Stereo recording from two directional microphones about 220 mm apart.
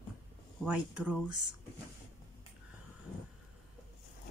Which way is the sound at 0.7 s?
5° right (ahead or behind).